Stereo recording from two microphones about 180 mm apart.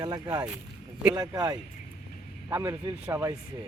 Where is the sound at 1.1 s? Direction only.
20° right (ahead or behind).